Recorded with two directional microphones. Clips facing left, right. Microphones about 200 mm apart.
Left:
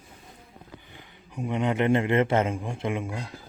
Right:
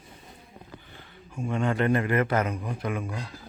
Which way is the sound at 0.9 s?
15° left (ahead or behind).